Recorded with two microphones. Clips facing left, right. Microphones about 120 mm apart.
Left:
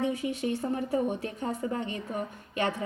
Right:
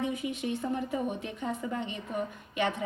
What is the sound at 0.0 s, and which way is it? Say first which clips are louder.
A woman's voice: left 3 dB; 30° left (ahead or behind).